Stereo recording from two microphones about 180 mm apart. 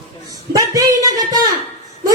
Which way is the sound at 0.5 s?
20° right (ahead or behind).